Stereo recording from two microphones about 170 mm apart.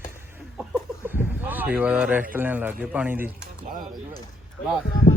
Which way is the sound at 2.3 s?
10° right (ahead or behind).